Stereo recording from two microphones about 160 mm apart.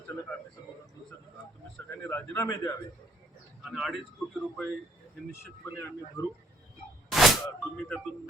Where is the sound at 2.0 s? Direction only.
15° left (ahead or behind).